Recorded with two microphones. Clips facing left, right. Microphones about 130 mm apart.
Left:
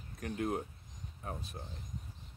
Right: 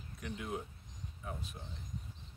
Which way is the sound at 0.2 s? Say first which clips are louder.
Left 6 dB; 50° left (ahead or behind).